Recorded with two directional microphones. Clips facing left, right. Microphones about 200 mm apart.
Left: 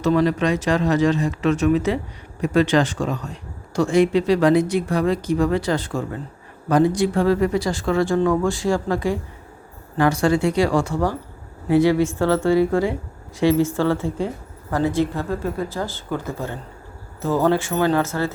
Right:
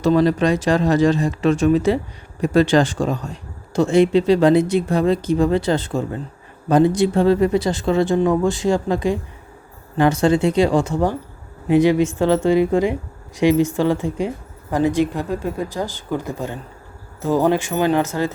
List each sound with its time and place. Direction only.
0.0 s speech: 30° right (ahead or behind); by 18.3 s 15° right (ahead or behind)